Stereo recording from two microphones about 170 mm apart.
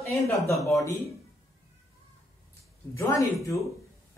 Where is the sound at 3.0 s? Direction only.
20° left (ahead or behind).